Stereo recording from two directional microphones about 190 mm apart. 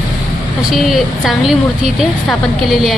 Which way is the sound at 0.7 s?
Centre (ahead or behind).